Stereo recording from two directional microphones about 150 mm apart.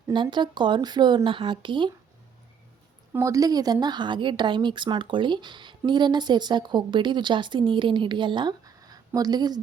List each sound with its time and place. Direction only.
0.1 s speech: 30° right (ahead or behind)
3.1 s speech: 20° right (ahead or behind)